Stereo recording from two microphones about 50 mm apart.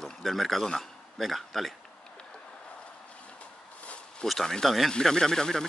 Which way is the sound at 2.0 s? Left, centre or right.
Centre.